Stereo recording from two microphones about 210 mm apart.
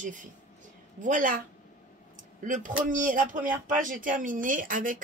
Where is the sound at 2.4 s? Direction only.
40° right (ahead or behind).